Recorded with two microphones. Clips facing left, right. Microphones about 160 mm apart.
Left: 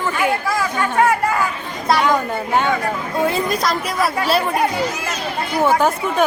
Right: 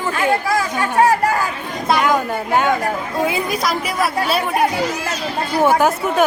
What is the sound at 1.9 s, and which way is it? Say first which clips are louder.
A woman's voice: even; centre (ahead or behind).